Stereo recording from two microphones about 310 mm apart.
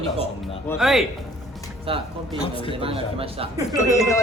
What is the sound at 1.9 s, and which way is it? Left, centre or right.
A woman's voice, centre.